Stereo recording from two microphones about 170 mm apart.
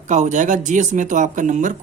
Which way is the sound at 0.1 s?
45° right (ahead or behind).